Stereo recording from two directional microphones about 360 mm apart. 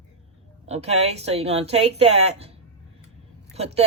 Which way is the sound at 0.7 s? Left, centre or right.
Centre.